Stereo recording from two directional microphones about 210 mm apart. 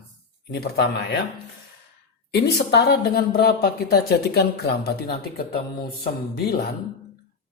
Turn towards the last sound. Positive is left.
turn(degrees=45)  # may be behind; listen again after turning